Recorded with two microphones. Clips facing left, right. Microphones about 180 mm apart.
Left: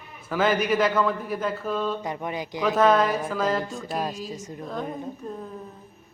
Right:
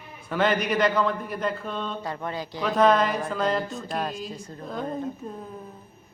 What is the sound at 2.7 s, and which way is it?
A man's voice, 5° left (ahead or behind).